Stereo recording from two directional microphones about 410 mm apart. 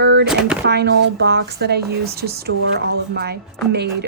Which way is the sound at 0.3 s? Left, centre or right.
Centre.